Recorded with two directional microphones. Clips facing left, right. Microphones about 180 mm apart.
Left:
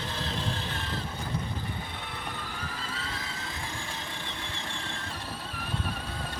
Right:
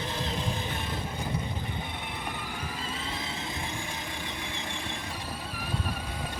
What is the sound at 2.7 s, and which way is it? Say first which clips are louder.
Vehicle: right 2 dB; 20° right (ahead or behind).